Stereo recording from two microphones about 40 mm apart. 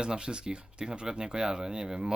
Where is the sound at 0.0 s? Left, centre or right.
Right.